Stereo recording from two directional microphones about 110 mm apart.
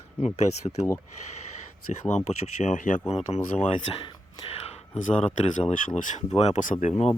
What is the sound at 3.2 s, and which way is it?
Speech, 90° left.